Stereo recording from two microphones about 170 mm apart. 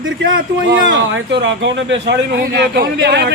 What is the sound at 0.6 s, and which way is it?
Speech, 90° right.